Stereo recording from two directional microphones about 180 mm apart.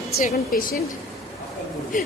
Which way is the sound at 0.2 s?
50° left (ahead or behind).